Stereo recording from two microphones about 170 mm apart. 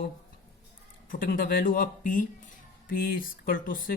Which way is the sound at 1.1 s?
55° left (ahead or behind).